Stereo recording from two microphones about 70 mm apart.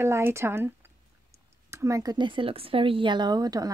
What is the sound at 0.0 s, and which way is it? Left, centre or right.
Speech, right.